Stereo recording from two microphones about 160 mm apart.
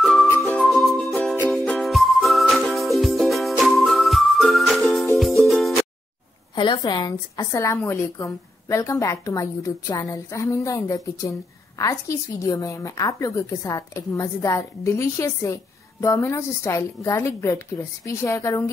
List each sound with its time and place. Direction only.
0.0 s music: centre (ahead or behind)
6.5 s a woman's voice: 25° left (ahead or behind)